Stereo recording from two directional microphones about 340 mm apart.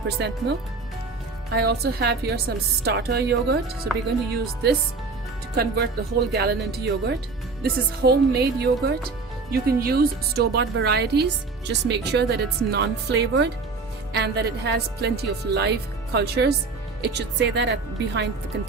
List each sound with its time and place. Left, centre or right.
0.2 s speech: right
1.5 s speech: right